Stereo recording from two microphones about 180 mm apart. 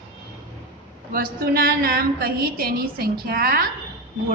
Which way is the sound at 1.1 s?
55° right (ahead or behind).